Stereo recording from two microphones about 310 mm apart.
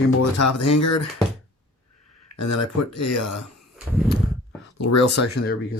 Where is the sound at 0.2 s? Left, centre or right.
Left.